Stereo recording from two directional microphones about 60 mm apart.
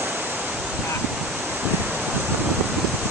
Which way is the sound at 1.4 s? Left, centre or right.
Right.